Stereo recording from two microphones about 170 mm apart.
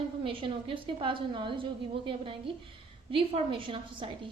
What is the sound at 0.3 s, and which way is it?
A woman's voice, 30° right (ahead or behind).